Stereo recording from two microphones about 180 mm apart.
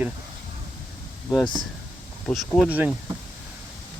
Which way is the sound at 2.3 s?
Centre (ahead or behind).